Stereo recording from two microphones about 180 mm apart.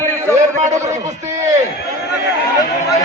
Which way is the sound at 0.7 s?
15° right (ahead or behind).